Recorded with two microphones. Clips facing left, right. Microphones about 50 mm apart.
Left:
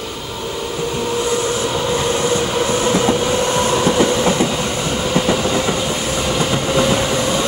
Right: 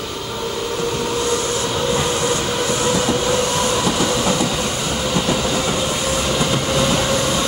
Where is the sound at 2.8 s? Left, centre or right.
Left.